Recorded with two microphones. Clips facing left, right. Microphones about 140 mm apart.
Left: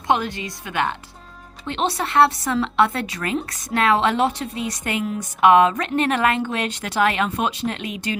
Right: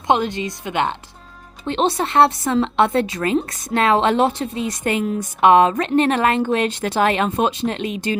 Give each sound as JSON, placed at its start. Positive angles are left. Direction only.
{"t": 0.1, "sound": "a woman's voice", "side_deg": -25}